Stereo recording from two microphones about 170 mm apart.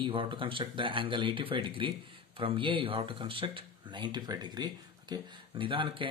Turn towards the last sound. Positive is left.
turn(degrees=-30)  # may be behind; listen again after turning